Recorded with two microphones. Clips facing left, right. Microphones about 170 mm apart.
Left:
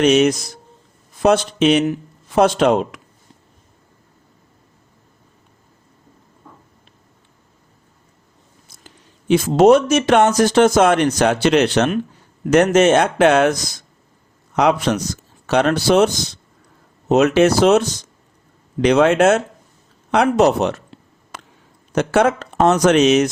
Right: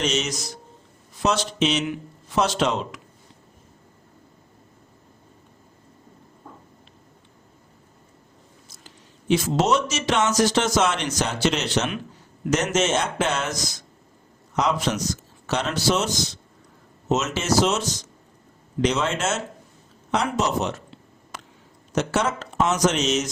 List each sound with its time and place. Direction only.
0.0 s speech: 60° left (ahead or behind)
8.7 s speech: 55° left (ahead or behind)
21.3 s a sound: 60° left (ahead or behind)
21.9 s speech: 60° left (ahead or behind)